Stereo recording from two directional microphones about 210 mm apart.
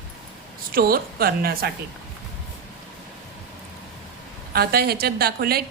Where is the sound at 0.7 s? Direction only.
45° right (ahead or behind).